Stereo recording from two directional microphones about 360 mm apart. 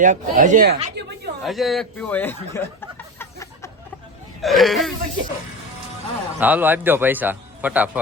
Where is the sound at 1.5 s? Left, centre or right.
Centre.